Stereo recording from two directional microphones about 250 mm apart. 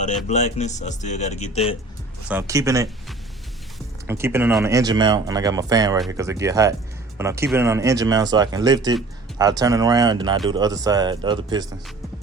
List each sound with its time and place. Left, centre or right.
0.3 s speech: left
2.2 s speech: centre
4.0 s speech: centre